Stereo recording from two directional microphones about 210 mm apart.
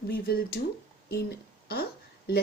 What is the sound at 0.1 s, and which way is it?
Speech, 45° left (ahead or behind).